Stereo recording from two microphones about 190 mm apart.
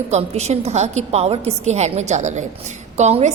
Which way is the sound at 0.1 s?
35° right (ahead or behind).